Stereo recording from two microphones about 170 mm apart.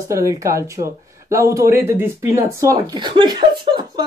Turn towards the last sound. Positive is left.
turn(degrees=-25)  # may be behind; listen again after turning